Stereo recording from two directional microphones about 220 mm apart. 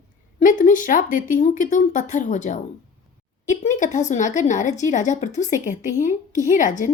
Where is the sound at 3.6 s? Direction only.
35° left (ahead or behind).